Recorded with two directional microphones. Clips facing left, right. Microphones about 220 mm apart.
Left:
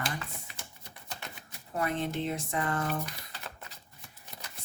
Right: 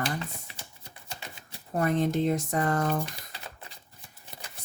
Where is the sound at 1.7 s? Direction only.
45° right (ahead or behind).